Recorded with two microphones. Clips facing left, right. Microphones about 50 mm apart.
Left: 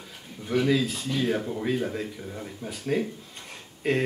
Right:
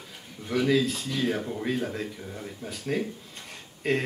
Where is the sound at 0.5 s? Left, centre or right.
Centre.